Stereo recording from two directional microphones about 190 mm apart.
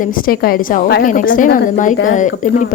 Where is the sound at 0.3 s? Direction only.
50° left (ahead or behind).